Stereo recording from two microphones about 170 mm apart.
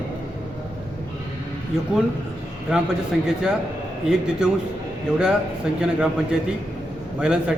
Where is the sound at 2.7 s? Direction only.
5° right (ahead or behind).